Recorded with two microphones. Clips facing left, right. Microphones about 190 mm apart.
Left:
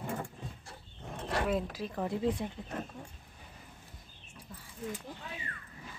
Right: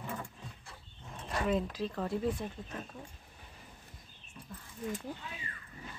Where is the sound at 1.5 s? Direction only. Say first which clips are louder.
Right 1 dB; 5° left (ahead or behind).